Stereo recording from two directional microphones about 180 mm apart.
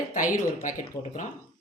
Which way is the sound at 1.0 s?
20° left (ahead or behind).